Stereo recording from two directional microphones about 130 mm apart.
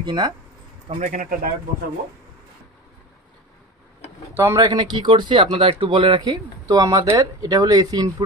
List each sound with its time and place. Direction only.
0.0 s speech: 35° right (ahead or behind)
0.8 s a man's voice: 75° right (ahead or behind)
4.3 s speech: 20° right (ahead or behind)
4.6 s speech: 35° right (ahead or behind)